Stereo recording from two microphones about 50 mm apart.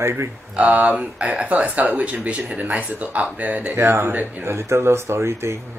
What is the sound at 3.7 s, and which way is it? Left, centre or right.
Speech, right.